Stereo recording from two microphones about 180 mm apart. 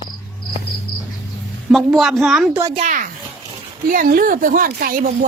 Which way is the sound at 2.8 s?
45° right (ahead or behind).